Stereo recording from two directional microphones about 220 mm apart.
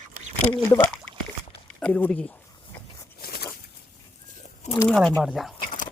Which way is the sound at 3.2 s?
45° left (ahead or behind).